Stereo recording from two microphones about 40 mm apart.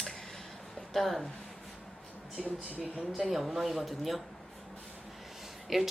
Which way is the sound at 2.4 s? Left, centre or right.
Centre.